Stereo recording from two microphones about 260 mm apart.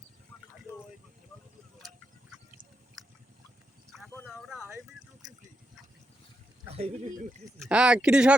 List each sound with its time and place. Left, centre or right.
3.9 s a sound: centre
6.7 s speech: right
7.6 s speech: centre